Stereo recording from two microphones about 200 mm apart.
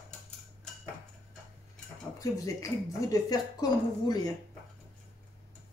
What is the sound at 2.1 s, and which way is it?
Speech, 15° left (ahead or behind).